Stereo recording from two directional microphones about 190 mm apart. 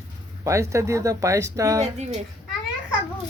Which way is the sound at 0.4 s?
15° right (ahead or behind).